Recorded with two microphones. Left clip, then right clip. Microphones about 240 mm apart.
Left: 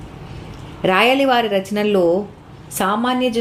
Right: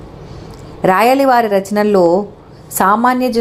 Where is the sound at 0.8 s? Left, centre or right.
Centre.